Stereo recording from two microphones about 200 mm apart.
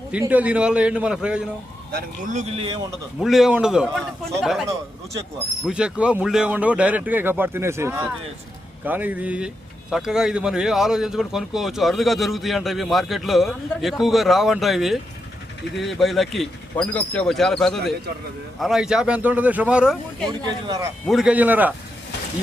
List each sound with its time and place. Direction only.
0.1 s speech: 5° right (ahead or behind)
1.9 s speech: 50° right (ahead or behind)
2.3 s speech: 25° right (ahead or behind)
3.2 s speech: centre (ahead or behind)
5.6 s speech: 5° right (ahead or behind)
20.4 s speech: 20° right (ahead or behind)
21.1 s speech: 5° right (ahead or behind)